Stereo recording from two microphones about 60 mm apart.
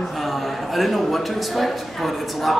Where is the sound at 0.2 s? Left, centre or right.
Centre.